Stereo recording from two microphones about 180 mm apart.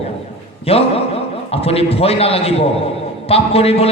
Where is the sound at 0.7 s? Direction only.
35° left (ahead or behind).